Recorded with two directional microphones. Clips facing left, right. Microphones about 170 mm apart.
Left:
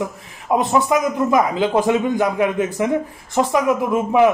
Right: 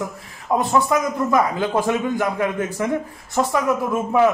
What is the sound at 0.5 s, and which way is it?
A man's voice, 15° left (ahead or behind).